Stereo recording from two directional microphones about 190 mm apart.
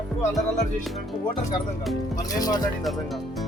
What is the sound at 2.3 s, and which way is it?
Speech, 20° left (ahead or behind).